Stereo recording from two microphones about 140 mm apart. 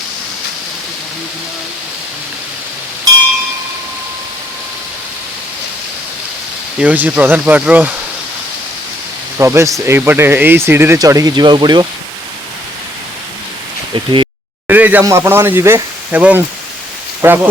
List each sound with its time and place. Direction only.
6.7 s speech: 10° right (ahead or behind)
9.4 s speech: 20° right (ahead or behind)
13.9 s speech: 35° right (ahead or behind)
14.7 s speech: 10° right (ahead or behind)